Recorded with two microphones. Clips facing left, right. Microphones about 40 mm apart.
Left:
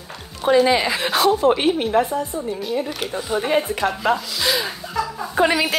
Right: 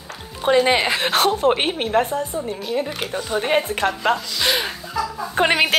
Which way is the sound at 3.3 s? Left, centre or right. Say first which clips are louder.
Even; right.